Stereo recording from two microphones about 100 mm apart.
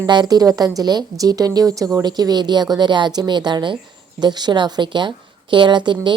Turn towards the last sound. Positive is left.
turn(degrees=-50)  # may be behind; listen again after turning